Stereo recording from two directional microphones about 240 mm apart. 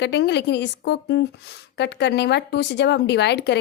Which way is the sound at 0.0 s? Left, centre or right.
Left.